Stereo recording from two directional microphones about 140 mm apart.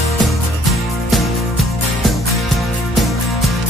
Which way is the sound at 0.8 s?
Centre (ahead or behind).